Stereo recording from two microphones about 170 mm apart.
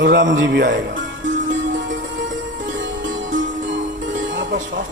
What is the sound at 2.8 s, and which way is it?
Music, 90° right.